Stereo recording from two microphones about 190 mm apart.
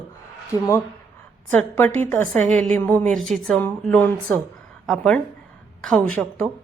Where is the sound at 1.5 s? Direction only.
10° left (ahead or behind).